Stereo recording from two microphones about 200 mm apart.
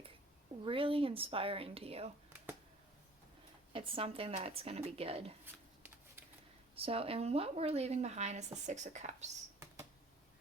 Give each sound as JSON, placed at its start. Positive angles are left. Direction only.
{"t": 0.6, "sound": "a woman's voice", "side_deg": -25}
{"t": 3.7, "sound": "a woman's voice", "side_deg": -25}
{"t": 6.7, "sound": "speech", "side_deg": -30}